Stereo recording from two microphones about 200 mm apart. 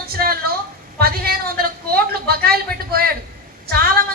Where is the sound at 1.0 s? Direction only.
50° right (ahead or behind).